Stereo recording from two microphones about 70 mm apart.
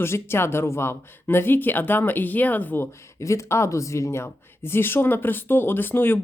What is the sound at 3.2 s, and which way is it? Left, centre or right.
A woman's voice, left.